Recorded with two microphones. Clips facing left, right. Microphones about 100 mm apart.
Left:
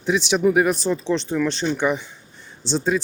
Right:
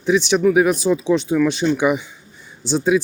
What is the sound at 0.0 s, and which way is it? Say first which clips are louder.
Speech: right 3 dB; centre (ahead or behind).